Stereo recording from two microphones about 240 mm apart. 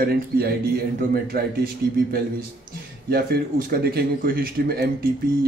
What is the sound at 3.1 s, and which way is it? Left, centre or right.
Speech, right.